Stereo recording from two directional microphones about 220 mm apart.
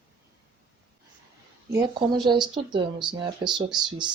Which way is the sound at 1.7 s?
15° right (ahead or behind).